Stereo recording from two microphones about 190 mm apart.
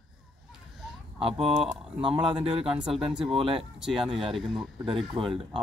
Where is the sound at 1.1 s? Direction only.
30° right (ahead or behind).